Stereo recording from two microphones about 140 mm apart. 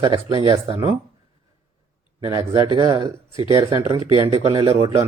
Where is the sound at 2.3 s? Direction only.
35° right (ahead or behind).